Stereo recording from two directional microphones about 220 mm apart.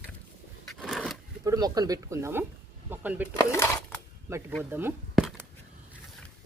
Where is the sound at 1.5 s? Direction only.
15° right (ahead or behind).